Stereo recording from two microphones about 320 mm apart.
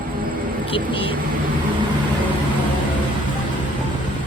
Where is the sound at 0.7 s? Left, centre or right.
Centre.